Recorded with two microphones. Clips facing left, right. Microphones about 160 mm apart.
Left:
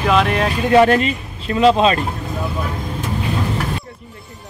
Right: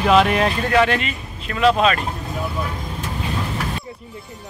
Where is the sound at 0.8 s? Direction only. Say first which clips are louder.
Left 6 dB; 40° left (ahead or behind).